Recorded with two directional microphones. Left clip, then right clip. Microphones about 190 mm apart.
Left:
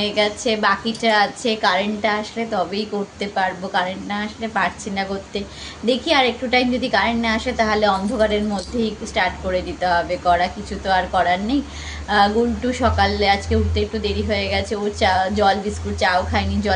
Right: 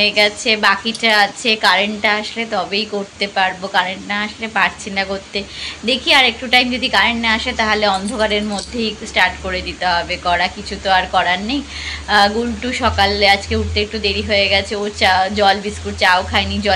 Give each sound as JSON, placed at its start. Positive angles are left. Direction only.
{"t": 0.0, "sound": "a woman's voice", "side_deg": 10}